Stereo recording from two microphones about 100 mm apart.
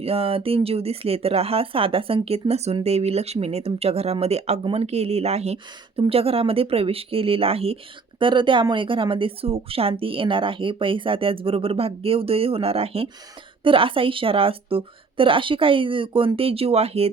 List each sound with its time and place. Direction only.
0.0 s speech: 80° right
6.0 s speech: 70° right (ahead or behind)
8.2 s a woman's voice: 55° right (ahead or behind); by 13.1 s 80° right
13.7 s a woman's voice: 60° right (ahead or behind); by 17.1 s 90° right